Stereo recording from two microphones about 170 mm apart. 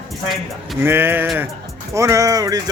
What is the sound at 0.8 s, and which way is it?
Speech, 15° right (ahead or behind).